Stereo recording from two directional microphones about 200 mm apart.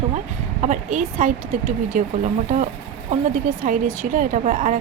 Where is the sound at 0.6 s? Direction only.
40° right (ahead or behind).